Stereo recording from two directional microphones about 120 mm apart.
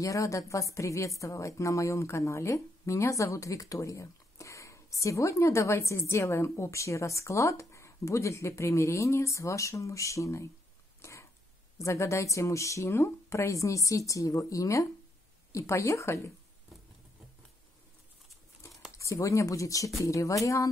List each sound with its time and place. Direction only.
0.0 s speech: 25° left (ahead or behind)
11.0 s a sound: 25° left (ahead or behind)
11.8 s speech: 25° left (ahead or behind)
18.9 s speech: 25° left (ahead or behind)